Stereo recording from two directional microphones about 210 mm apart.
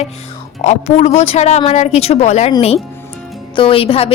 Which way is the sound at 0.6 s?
35° left (ahead or behind).